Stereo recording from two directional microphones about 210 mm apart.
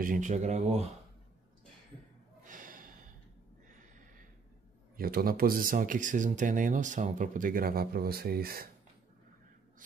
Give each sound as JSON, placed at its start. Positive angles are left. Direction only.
{"t": 0.0, "sound": "speech", "side_deg": -40}
{"t": 2.4, "sound": "gasp", "side_deg": -40}
{"t": 4.9, "sound": "speech", "side_deg": -45}